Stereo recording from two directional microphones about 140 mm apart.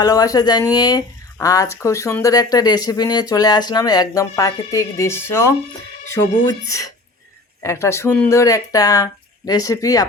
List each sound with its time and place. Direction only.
0.0 s speech: 25° left (ahead or behind)